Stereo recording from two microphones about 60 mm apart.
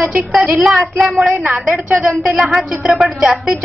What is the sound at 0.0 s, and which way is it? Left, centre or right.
Speech, centre.